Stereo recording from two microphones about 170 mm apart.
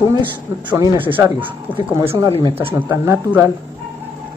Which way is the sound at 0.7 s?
10° right (ahead or behind).